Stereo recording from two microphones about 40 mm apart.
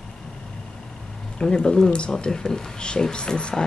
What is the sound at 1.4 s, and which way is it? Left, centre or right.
Speech, left.